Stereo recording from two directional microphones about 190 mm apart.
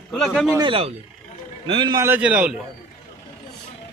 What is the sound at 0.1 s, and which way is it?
Speech, 5° left (ahead or behind).